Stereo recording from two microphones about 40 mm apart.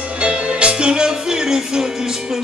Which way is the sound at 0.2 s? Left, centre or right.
Right.